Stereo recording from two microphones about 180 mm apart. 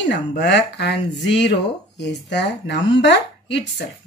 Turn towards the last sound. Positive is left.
turn(degrees=75)  # may be behind; listen again after turning